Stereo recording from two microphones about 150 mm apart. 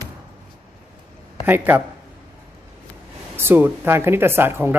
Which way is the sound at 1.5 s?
15° right (ahead or behind).